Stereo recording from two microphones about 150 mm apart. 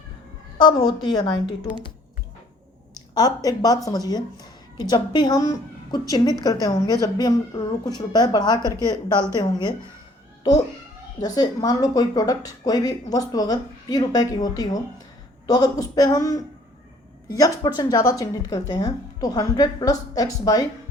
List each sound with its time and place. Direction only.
0.6 s a woman's voice: 30° left (ahead or behind)
3.2 s a woman's voice: 25° left (ahead or behind)
11.2 s a woman's voice: 25° left (ahead or behind)